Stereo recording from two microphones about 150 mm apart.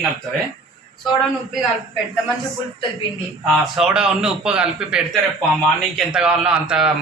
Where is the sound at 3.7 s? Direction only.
5° right (ahead or behind).